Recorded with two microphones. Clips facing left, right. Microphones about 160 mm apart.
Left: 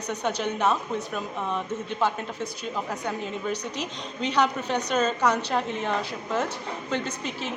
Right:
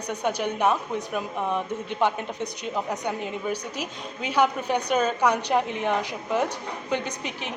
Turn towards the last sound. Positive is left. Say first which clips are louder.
# left 1 dB
turn(degrees=-15)  # may be behind; listen again after turning